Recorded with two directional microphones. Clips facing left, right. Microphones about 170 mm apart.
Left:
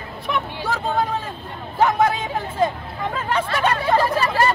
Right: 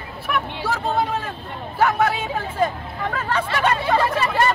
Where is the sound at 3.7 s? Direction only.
Centre (ahead or behind).